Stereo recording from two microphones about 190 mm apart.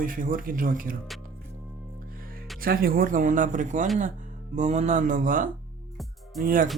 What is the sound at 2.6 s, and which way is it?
A man's voice, 50° right (ahead or behind).